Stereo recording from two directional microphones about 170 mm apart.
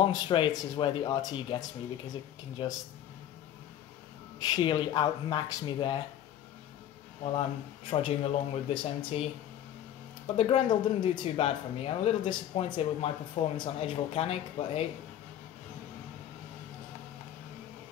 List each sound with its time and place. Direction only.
0.1 s speech: 25° left (ahead or behind)
4.5 s speech: 25° left (ahead or behind)
7.3 s speech: 30° left (ahead or behind)